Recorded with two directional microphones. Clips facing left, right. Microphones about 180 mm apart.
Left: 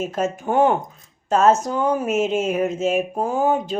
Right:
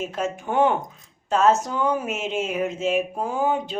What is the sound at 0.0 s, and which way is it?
Speech, 45° left (ahead or behind).